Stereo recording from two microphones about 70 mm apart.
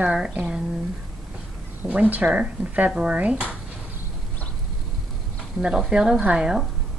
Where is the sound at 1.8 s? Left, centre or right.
Right.